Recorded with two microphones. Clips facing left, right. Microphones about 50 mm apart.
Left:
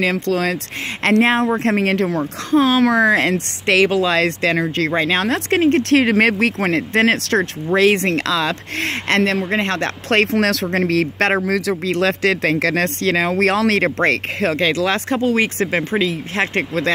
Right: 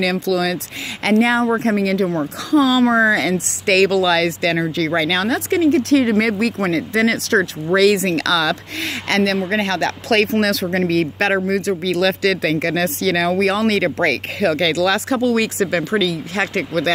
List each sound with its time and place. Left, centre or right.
0.0 s a woman's voice: left
2.8 s speech: left
3.1 s speech: left
3.7 s a woman's voice: left
8.2 s speech: left
10.2 s a woman's voice: left
13.4 s speech: left
14.0 s speech: left